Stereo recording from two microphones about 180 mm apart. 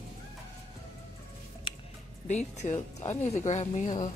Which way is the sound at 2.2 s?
40° left (ahead or behind).